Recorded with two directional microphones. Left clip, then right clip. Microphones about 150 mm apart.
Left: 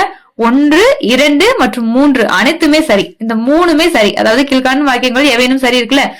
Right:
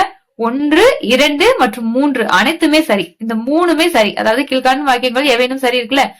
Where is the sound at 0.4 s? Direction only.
30° left (ahead or behind).